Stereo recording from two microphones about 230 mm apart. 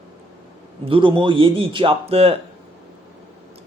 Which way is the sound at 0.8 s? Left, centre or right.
Right.